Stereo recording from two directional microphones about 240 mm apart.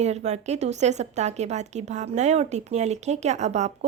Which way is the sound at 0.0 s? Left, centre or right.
Right.